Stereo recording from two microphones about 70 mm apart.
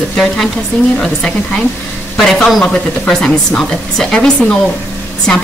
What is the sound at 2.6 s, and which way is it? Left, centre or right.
Speech, centre.